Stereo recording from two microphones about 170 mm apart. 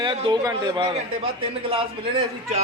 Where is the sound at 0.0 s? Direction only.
30° right (ahead or behind).